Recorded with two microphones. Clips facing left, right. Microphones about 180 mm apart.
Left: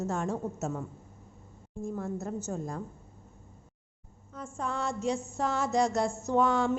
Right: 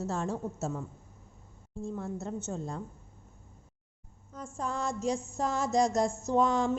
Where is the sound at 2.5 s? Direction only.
25° right (ahead or behind).